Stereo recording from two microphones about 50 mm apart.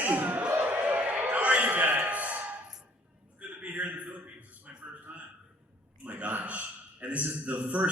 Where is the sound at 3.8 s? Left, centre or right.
Right.